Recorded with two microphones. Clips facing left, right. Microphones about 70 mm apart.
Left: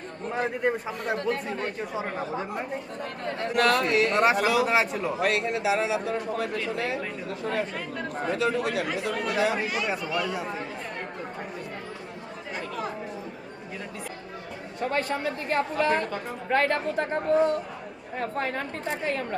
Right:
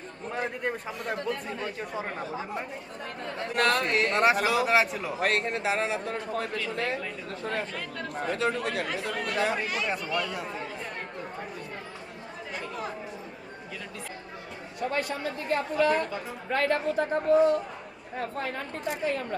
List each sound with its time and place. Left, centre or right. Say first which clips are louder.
0.3 s speech: left 5 dB; centre
1.0 s a woman's voice: left 4 dB; left
1.9 s speech: left 3 dB; centre
3.5 s a man's voice: left 3 dB; right
4.1 s speech: left 2 dB; centre
5.2 s a man's voice: left 1 dB; right
7.4 s speech: left 3 dB; centre
8.4 s a man's voice: left 3 dB; right
9.2 s speech: left 2 dB; centre
14.8 s a woman's voice: left 2 dB; left